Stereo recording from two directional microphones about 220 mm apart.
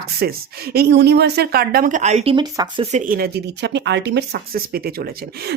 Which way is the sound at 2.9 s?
35° right (ahead or behind).